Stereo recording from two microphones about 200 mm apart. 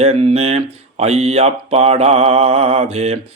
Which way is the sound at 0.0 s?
30° right (ahead or behind).